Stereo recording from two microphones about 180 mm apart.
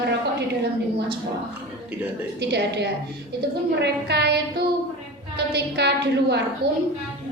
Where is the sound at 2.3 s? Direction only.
70° right (ahead or behind).